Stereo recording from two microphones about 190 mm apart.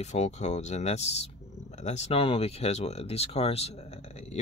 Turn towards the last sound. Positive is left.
turn(degrees=35)  # may be behind; listen again after turning